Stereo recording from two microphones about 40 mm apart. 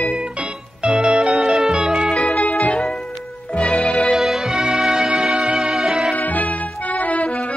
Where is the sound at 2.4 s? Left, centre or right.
Left.